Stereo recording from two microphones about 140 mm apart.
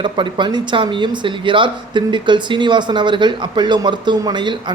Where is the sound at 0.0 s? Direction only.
35° right (ahead or behind).